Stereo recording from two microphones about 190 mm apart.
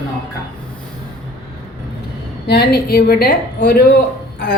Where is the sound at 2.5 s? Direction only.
55° left (ahead or behind).